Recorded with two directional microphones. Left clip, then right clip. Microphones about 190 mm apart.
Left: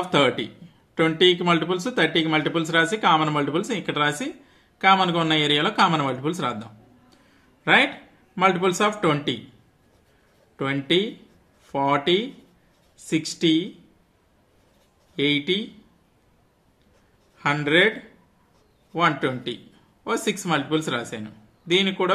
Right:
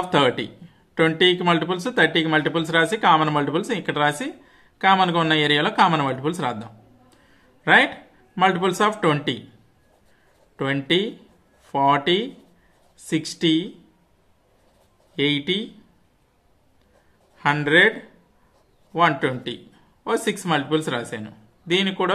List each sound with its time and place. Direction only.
0.1 s a man's voice: 15° right (ahead or behind)
10.5 s a man's voice: 25° right (ahead or behind)
15.1 s a man's voice: 20° right (ahead or behind)
17.4 s a man's voice: 20° right (ahead or behind)
18.9 s a man's voice: 20° right (ahead or behind)